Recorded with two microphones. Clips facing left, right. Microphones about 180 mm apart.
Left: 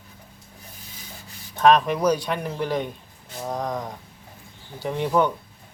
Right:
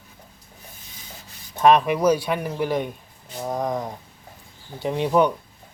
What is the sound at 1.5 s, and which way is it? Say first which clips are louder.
Speech: right 1 dB; 10° right (ahead or behind).